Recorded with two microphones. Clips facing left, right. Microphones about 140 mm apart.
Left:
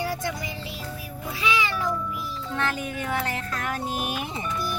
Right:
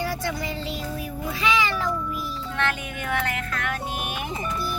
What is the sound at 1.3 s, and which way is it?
Meow, 10° left (ahead or behind).